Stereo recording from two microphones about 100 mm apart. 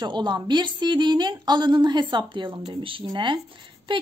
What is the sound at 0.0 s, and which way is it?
A woman's voice, 45° right (ahead or behind).